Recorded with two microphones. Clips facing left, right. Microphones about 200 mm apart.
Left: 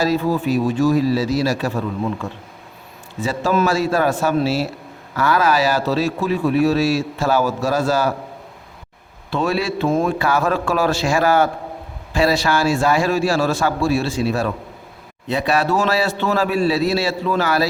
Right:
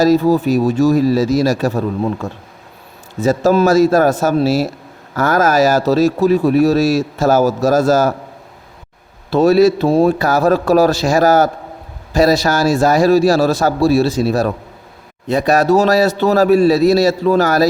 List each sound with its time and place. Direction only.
0.0 s a man's voice: 40° right (ahead or behind)
9.3 s a man's voice: 40° right (ahead or behind)